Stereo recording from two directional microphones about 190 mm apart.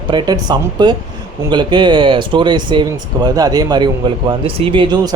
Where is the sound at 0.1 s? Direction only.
25° right (ahead or behind).